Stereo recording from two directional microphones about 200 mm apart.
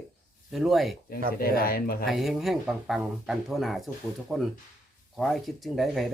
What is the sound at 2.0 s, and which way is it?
Speech, centre (ahead or behind).